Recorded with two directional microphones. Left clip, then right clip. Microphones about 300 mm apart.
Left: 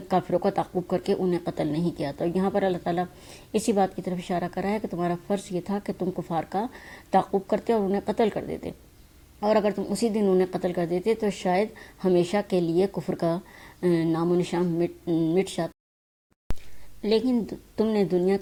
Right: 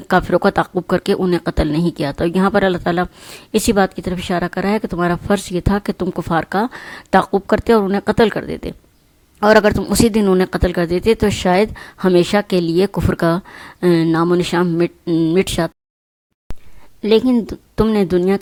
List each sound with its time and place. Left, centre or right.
0.1 s speech: right
16.5 s a sound: centre
17.0 s speech: right